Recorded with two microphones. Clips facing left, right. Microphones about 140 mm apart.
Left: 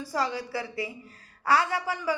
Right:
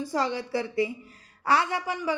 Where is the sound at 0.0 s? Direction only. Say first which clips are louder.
Right 2 dB; 25° right (ahead or behind).